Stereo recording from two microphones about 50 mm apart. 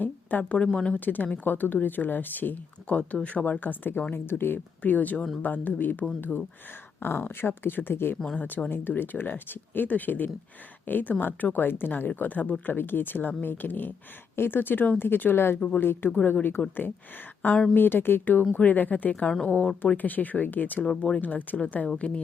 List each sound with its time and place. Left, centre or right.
0.0 s a sound: left
0.5 s a woman's voice: left
0.9 s speech: left
2.9 s a woman's voice: left
4.8 s speech: left
17.7 s speech: left
20.8 s speech: centre
21.2 s a woman's voice: left